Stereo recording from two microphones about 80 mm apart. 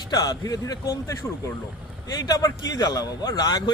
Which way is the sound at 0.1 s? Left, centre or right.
Left.